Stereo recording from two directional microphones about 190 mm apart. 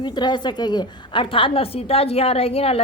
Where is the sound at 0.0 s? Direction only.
20° left (ahead or behind).